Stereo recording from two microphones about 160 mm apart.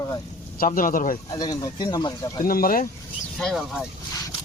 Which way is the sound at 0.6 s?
60° left (ahead or behind).